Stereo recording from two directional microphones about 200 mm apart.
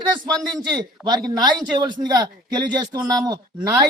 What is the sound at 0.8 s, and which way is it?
A man's voice, 20° right (ahead or behind).